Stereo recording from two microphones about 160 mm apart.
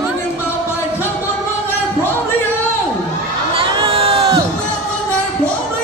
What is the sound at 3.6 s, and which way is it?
Crowd, 35° right (ahead or behind).